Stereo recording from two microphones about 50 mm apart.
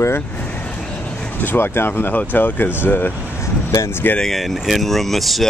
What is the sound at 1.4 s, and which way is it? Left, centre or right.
Speech, left.